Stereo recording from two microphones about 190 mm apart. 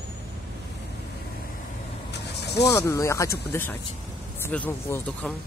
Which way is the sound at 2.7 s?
15° left (ahead or behind).